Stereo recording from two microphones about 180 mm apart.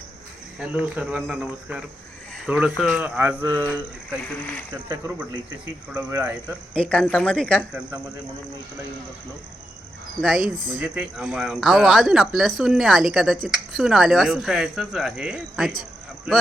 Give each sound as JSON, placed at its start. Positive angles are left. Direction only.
{"t": 0.6, "sound": "speech", "side_deg": -5}
{"t": 6.7, "sound": "speech", "side_deg": 5}
{"t": 10.2, "sound": "speech", "side_deg": 0}
{"t": 15.8, "sound": "a sound", "side_deg": 0}